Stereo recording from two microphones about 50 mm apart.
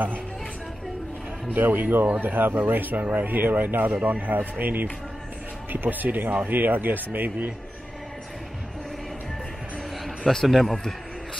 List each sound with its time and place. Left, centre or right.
1.5 s speech: right
10.0 s a man's voice: centre